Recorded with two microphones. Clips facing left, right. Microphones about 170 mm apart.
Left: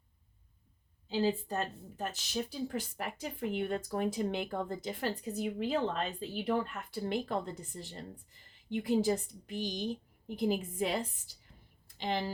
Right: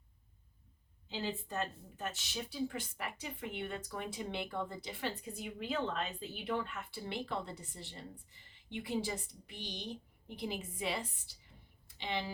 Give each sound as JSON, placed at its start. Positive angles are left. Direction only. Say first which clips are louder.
{"t": 1.2, "sound": "a woman's voice", "louder": "left 7 dB", "side_deg": 35}